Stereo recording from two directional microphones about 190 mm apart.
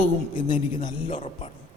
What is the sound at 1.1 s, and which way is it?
Speech, 40° left (ahead or behind).